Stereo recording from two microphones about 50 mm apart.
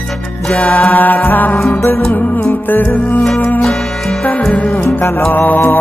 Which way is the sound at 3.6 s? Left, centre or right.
Centre.